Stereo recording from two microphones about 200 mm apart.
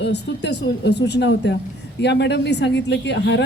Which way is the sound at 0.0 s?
60° left (ahead or behind).